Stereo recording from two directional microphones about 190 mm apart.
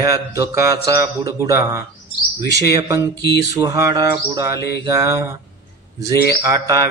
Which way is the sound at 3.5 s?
15° right (ahead or behind).